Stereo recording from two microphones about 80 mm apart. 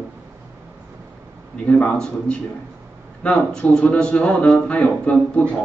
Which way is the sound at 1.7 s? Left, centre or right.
Centre.